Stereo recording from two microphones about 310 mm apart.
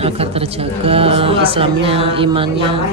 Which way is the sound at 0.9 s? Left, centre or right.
Centre.